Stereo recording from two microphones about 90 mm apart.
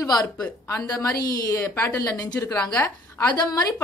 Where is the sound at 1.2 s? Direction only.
40° left (ahead or behind).